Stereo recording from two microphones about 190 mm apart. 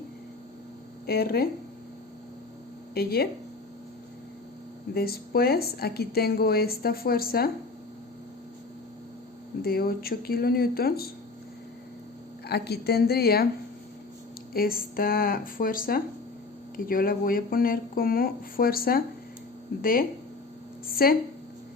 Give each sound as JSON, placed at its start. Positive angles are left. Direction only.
{"t": 1.0, "sound": "a woman's voice", "side_deg": 55}
{"t": 2.9, "sound": "a woman's voice", "side_deg": 55}
{"t": 4.9, "sound": "a woman's voice", "side_deg": 55}
{"t": 9.6, "sound": "a woman's voice", "side_deg": 55}
{"t": 12.5, "sound": "a woman's voice", "side_deg": 60}
{"t": 14.5, "sound": "a woman's voice", "side_deg": 50}